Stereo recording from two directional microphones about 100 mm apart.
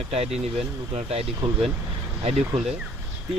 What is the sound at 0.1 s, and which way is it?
Speech, 90° right.